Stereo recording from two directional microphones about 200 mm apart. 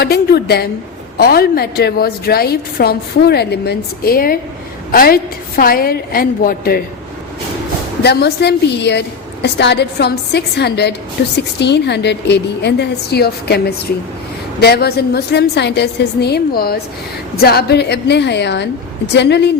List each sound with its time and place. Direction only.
0.0 s a woman's voice: 55° left (ahead or behind)
8.0 s a woman's voice: 55° left (ahead or behind)